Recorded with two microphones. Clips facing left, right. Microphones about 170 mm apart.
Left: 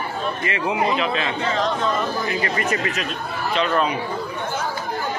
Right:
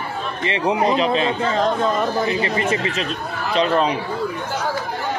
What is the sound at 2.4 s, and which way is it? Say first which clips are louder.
A man's voice: right 2 dB; 25° right (ahead or behind).